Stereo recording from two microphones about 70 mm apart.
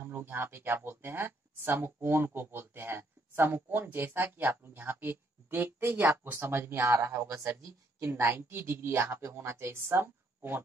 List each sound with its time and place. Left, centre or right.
0.0 s speech: right